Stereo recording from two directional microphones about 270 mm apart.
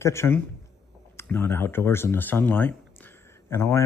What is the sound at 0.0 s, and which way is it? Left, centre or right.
Speech, centre.